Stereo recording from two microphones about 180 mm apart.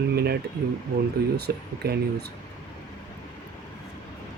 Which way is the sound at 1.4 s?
60° right (ahead or behind).